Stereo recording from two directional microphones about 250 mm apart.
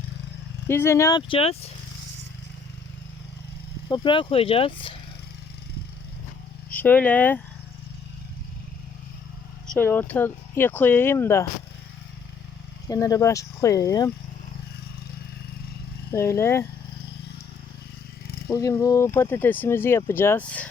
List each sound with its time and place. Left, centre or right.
0.7 s speech: centre
3.8 s speech: centre
6.7 s speech: centre
9.6 s speech: centre
12.9 s speech: centre
16.1 s speech: centre
18.4 s speech: centre